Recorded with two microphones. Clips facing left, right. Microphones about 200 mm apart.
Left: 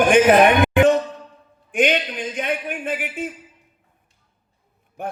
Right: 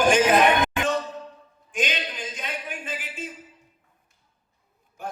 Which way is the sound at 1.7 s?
60° left (ahead or behind).